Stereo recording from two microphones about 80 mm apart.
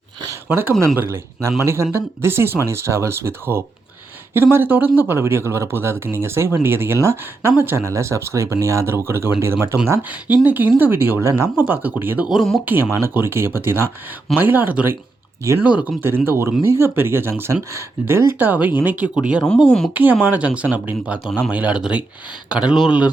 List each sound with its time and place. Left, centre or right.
0.4 s speech: right
10.0 s speech: centre
11.6 s speech: right
12.4 s speech: centre
12.6 s speech: right; by 19.4 s centre
19.6 s speech: centre
19.9 s speech: right